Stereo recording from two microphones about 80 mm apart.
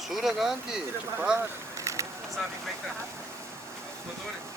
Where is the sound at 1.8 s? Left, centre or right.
Right.